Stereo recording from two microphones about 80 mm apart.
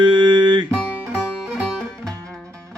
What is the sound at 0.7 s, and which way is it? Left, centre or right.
Music, centre.